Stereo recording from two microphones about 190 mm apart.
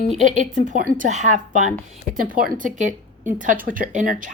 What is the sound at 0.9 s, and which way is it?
A woman's voice, 40° right (ahead or behind).